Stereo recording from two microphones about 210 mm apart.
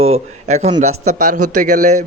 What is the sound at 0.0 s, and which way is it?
Speech, 30° right (ahead or behind).